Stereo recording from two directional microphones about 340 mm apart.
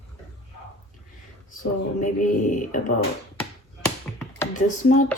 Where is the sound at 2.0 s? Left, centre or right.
Left.